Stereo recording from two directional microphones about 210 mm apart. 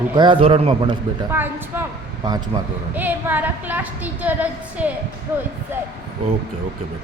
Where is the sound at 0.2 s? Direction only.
25° right (ahead or behind).